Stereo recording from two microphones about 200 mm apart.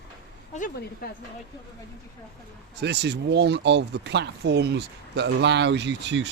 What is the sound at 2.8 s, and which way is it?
Speech, 55° right (ahead or behind).